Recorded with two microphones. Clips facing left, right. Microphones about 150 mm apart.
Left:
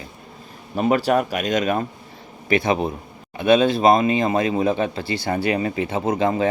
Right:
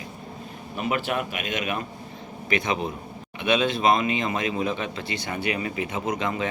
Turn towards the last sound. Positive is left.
turn(degrees=30)  # may be behind; listen again after turning